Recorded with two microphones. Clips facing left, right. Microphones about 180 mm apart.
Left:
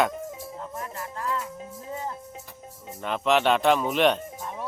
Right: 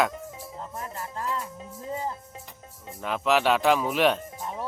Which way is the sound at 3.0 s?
5° right (ahead or behind).